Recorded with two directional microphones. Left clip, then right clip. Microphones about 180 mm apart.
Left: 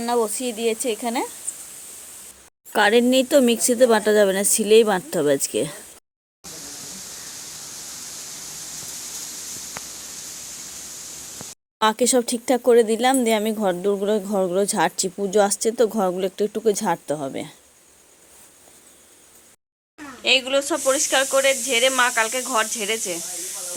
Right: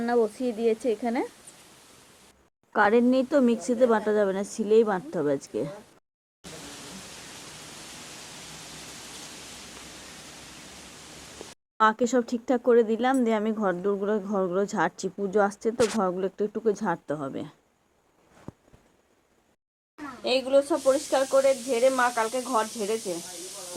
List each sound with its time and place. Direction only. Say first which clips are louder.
0.0 s speech: left 3 dB; 25° left (ahead or behind)
2.7 s speech: left 5 dB; 40° left (ahead or behind)
11.8 s speech: left 3 dB; 40° left (ahead or behind)
20.5 s speech: even; centre (ahead or behind)
20.7 s speech: left 3 dB; 10° left (ahead or behind)